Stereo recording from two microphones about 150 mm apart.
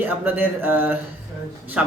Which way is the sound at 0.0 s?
15° right (ahead or behind).